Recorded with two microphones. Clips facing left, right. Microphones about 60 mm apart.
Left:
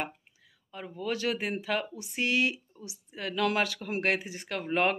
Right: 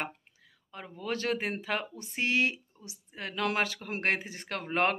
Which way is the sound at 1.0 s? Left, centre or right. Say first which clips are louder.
Left 1 dB; right.